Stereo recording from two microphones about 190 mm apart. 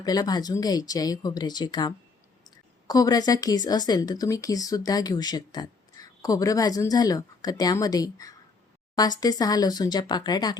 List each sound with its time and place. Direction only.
0.0 s speech: 20° left (ahead or behind)